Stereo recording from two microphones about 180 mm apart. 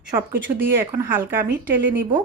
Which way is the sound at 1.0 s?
10° right (ahead or behind).